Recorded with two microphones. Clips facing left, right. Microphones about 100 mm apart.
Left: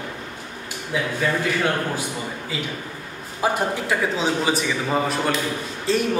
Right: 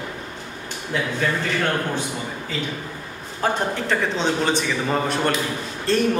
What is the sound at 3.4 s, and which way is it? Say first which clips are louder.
A man's voice: even; 10° left (ahead or behind).